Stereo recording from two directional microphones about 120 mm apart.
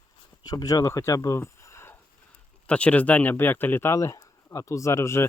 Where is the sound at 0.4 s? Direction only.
30° left (ahead or behind).